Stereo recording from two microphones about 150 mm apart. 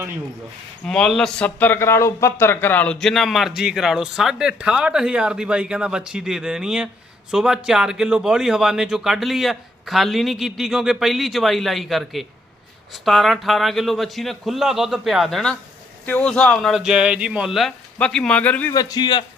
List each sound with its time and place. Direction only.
0.9 s speech: 5° left (ahead or behind)
18.7 s a man's voice: 25° left (ahead or behind)